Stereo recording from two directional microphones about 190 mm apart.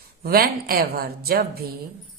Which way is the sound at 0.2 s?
55° right (ahead or behind).